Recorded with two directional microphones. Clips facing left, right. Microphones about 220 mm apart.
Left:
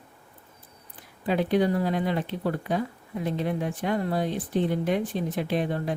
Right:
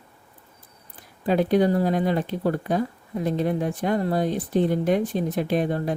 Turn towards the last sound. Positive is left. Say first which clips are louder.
# right 3 dB
turn(degrees=-45)  # may be behind; listen again after turning